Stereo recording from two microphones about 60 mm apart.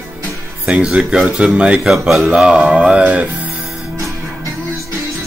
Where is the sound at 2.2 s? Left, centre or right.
Centre.